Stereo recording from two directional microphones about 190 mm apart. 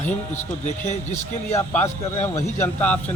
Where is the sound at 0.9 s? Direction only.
35° left (ahead or behind).